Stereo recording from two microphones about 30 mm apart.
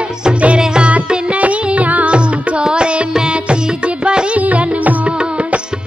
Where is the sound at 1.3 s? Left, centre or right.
Right.